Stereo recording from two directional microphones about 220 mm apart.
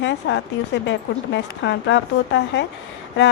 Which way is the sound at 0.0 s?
55° left (ahead or behind).